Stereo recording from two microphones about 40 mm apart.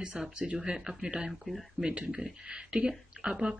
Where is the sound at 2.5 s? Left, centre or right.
Right.